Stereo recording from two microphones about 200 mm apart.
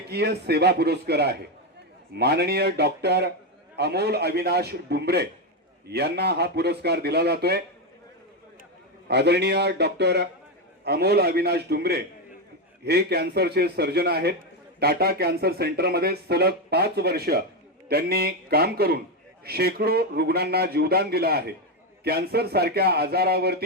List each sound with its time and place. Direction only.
0.1 s a man's voice: 55° right (ahead or behind)
9.0 s a man's voice: 55° right (ahead or behind)